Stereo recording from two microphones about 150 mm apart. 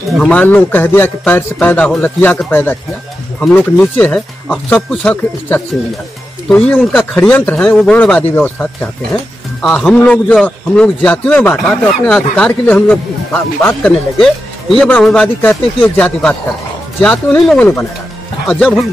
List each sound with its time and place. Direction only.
0.2 s a man's voice: 10° left (ahead or behind)
14.1 s speech: centre (ahead or behind)